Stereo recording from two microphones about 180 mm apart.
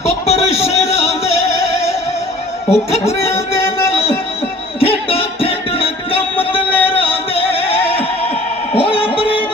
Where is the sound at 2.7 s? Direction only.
35° left (ahead or behind).